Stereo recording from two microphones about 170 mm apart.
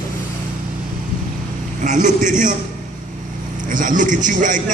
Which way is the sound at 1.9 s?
45° right (ahead or behind).